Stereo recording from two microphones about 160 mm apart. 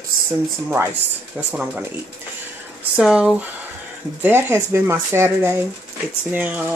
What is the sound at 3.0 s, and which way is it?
Speech, 5° right (ahead or behind).